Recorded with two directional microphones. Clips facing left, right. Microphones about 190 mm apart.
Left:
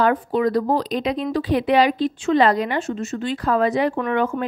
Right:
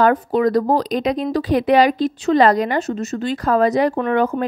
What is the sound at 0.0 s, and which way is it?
Speech, 45° right (ahead or behind).